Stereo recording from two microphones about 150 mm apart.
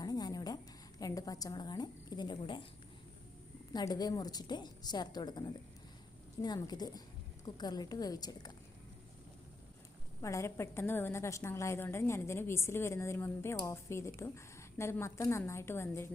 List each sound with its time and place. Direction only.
0.0 s a sound: 25° left (ahead or behind)
3.7 s a woman's voice: 25° left (ahead or behind)
10.2 s a woman's voice: 20° left (ahead or behind)